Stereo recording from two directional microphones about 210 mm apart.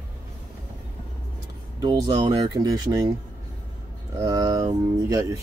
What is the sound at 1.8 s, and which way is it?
Speech, 20° right (ahead or behind).